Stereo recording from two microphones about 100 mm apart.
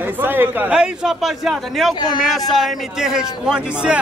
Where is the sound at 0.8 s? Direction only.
5° right (ahead or behind).